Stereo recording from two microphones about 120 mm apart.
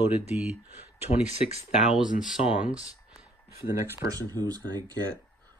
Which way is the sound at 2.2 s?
10° right (ahead or behind).